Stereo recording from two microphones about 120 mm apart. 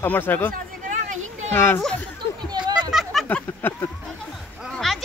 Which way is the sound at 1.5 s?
20° left (ahead or behind).